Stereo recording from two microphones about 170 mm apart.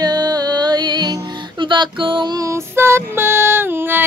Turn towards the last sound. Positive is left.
turn(degrees=-15)  # may be behind; listen again after turning